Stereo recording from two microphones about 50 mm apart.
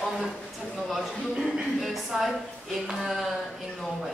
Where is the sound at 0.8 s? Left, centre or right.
Centre.